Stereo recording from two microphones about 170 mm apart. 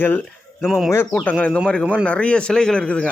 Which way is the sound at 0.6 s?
5° right (ahead or behind).